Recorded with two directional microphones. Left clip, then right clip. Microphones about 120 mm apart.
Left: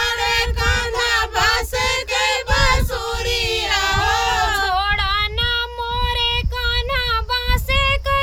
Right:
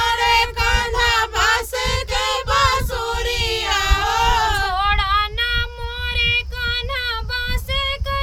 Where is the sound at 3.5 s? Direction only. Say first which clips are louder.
Left 1 dB; 40° right (ahead or behind).